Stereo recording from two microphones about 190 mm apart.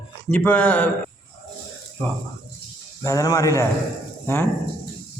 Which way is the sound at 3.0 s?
20° left (ahead or behind).